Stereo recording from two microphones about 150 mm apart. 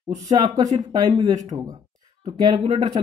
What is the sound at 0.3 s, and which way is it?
Speech, 25° right (ahead or behind).